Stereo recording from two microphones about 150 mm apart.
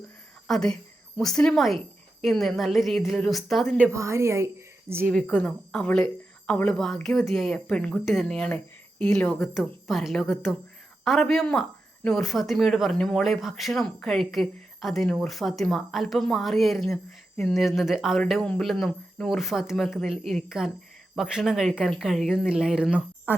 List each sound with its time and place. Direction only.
0.4 s speech: 5° left (ahead or behind)
3.9 s a woman's voice: 20° right (ahead or behind)
5.1 s speech: 5° left (ahead or behind); by 23.3 s 10° right (ahead or behind)